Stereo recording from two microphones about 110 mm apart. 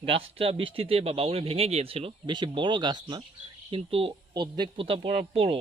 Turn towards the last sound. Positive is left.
turn(degrees=-65)  # may be behind; listen again after turning